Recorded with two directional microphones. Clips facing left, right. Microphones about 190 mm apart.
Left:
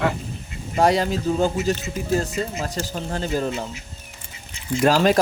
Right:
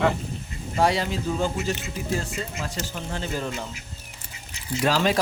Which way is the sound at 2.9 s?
40° left (ahead or behind).